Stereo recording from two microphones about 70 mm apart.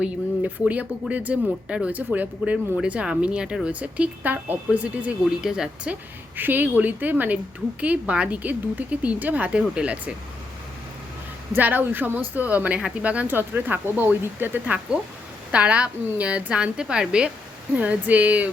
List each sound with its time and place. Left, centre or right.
0.0 s speech: centre
5.2 s a woman's voice: centre
5.9 s speech: right
11.5 s speech: right
15.5 s a woman's voice: centre